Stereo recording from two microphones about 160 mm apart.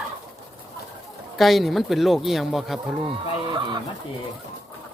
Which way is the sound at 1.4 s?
Centre (ahead or behind).